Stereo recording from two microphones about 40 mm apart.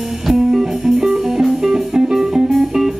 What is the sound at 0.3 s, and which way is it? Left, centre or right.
Music, centre.